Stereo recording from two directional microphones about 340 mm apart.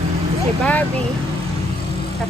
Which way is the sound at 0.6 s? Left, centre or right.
Centre.